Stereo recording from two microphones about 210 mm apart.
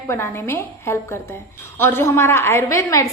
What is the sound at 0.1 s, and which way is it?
A woman's voice, 10° left (ahead or behind).